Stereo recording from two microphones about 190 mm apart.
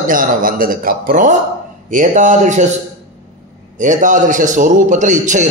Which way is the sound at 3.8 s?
40° right (ahead or behind).